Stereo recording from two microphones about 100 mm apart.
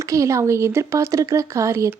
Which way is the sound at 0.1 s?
30° right (ahead or behind).